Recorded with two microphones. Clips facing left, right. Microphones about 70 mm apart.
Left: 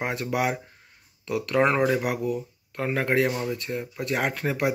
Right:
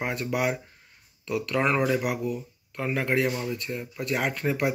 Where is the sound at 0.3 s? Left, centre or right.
Left.